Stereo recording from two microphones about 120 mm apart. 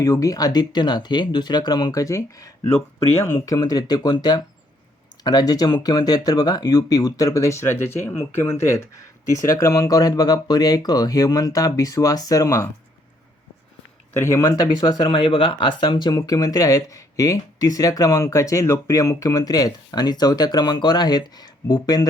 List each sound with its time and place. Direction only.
0.0 s speech: 30° left (ahead or behind)
2.7 s speech: 60° left (ahead or behind)
3.2 s speech: 30° left (ahead or behind)
14.2 s speech: 25° left (ahead or behind)